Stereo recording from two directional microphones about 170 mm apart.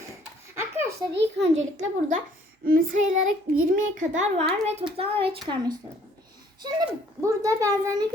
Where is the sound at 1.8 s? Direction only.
45° right (ahead or behind).